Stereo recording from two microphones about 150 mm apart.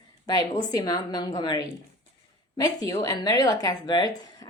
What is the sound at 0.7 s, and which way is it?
Speech, 25° left (ahead or behind).